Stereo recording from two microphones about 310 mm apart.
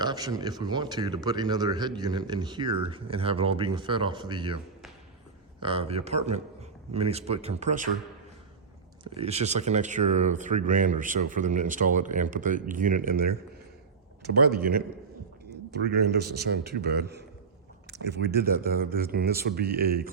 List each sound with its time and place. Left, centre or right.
0.0 s speech: centre
5.6 s speech: centre
9.1 s a man's voice: centre